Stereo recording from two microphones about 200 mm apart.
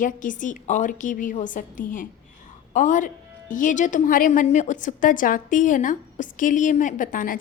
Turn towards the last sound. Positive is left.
turn(degrees=45)  # may be behind; listen again after turning